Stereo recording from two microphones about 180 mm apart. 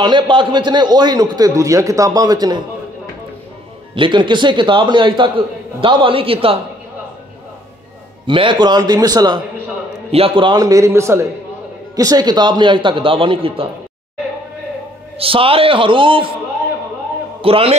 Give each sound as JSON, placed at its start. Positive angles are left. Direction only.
{"t": 0.0, "sound": "a man's voice", "side_deg": -25}
{"t": 3.9, "sound": "a man's voice", "side_deg": -25}
{"t": 8.3, "sound": "a man's voice", "side_deg": -25}
{"t": 15.1, "sound": "a man's voice", "side_deg": -30}
{"t": 17.4, "sound": "a man's voice", "side_deg": -30}